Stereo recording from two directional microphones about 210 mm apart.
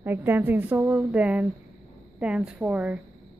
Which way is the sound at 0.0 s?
10° right (ahead or behind).